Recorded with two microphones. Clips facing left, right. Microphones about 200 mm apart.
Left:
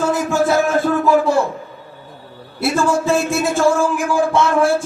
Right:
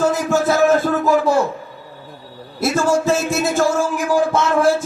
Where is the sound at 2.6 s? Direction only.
40° right (ahead or behind).